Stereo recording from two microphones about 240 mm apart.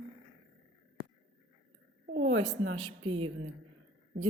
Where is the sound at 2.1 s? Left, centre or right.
Right.